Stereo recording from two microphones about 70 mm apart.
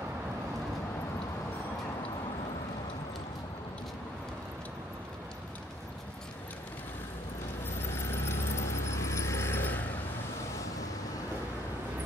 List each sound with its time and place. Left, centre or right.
7.6 s keys jangling: left